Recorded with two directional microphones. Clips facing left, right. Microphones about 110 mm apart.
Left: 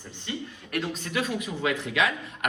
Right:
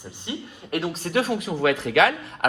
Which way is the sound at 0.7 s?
40° right (ahead or behind).